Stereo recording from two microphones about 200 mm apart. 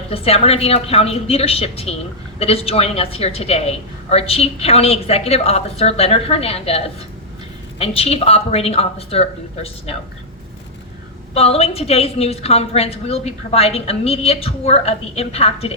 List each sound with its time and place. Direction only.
0.1 s a woman's voice: 30° left (ahead or behind)
11.3 s a woman's voice: 30° left (ahead or behind)